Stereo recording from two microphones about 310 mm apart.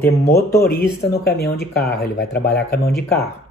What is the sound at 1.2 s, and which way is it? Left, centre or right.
Speech, left.